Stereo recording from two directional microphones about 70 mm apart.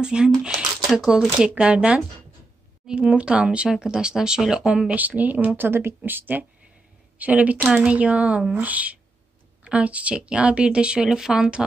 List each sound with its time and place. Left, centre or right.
0.0 s speech: centre